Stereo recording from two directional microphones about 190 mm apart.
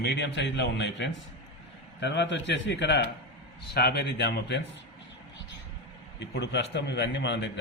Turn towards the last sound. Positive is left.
turn(degrees=65)  # may be behind; listen again after turning